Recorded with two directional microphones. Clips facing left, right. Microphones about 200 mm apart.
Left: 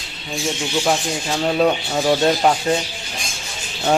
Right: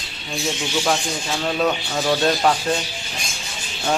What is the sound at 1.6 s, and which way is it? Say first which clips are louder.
Speech: left 4 dB; 20° left (ahead or behind).